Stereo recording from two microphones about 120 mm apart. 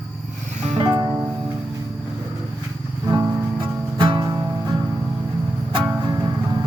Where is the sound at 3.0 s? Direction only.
25° right (ahead or behind).